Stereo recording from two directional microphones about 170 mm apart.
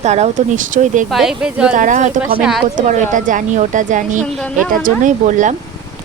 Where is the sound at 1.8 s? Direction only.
45° right (ahead or behind).